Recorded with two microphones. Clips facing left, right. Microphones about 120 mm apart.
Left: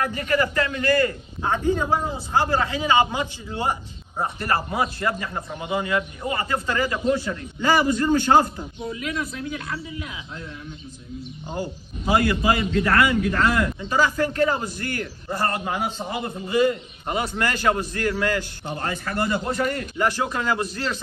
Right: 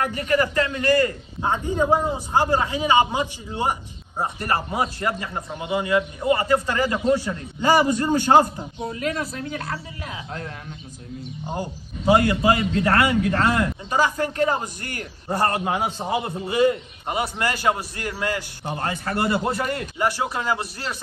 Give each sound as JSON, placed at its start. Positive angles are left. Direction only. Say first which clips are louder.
{"t": 0.2, "sound": "a man's voice", "louder": "right 2 dB", "side_deg": -25}
{"t": 8.8, "sound": "a man's voice", "louder": "right 2 dB", "side_deg": -40}
{"t": 12.3, "sound": "a man's voice", "louder": "right 2 dB", "side_deg": -30}
{"t": 19.0, "sound": "a man's voice", "louder": "right 2 dB", "side_deg": -30}
{"t": 20.0, "sound": "a man's voice", "louder": "left 1 dB", "side_deg": -15}